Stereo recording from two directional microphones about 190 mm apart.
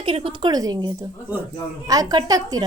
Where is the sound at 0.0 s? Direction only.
30° right (ahead or behind).